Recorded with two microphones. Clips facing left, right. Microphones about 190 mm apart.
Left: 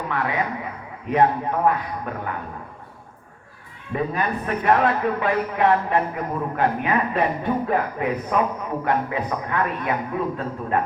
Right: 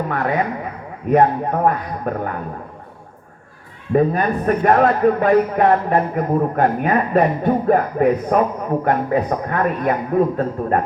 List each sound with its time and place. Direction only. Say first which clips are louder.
0.1 s a man's voice: right 5 dB; 45° right (ahead or behind)
3.9 s a man's voice: right 8 dB; 45° right (ahead or behind)